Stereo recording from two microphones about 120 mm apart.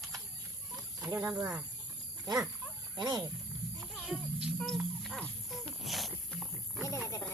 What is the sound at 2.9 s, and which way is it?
Speech, 35° right (ahead or behind).